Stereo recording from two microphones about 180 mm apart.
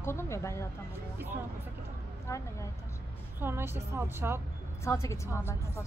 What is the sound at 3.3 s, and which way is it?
Speech, 10° right (ahead or behind).